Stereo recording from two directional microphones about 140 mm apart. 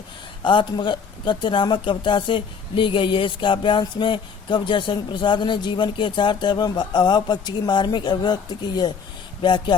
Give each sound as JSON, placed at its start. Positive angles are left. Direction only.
{"t": 0.4, "sound": "speech", "side_deg": 35}